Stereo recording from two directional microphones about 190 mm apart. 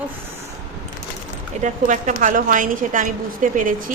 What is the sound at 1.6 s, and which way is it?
A woman's voice, 40° right (ahead or behind).